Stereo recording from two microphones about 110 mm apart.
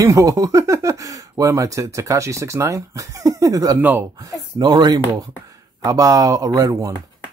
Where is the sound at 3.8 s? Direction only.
15° right (ahead or behind).